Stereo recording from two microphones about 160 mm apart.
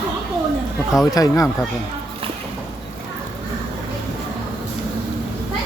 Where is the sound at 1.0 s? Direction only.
20° left (ahead or behind).